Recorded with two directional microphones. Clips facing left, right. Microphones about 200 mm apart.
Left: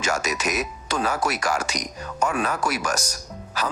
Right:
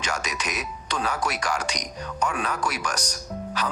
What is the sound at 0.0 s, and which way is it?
Speech, 5° left (ahead or behind).